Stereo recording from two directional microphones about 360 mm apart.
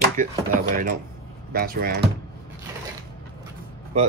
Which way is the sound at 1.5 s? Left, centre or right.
Right.